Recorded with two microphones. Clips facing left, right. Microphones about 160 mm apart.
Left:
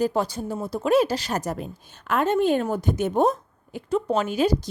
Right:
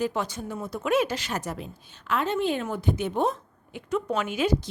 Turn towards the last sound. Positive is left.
turn(degrees=35)  # may be behind; listen again after turning